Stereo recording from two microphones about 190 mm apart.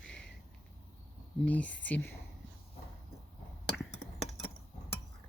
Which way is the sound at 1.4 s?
5° left (ahead or behind).